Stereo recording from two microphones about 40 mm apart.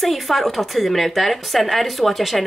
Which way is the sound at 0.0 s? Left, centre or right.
Centre.